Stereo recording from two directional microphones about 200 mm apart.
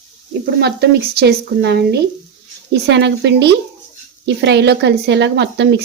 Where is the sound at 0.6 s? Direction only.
55° right (ahead or behind).